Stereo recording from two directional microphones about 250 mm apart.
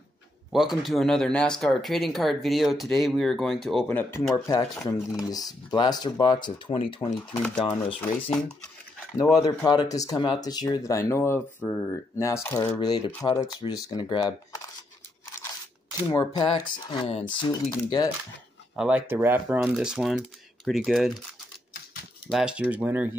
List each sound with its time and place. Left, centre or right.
0.5 s speech: centre; by 7.4 s left
8.0 s speech: centre
9.3 s speech: centre
16.1 s speech: centre
18.8 s speech: centre
22.3 s speech: centre